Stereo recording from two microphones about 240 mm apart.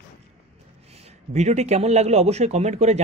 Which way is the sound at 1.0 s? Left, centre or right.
Right.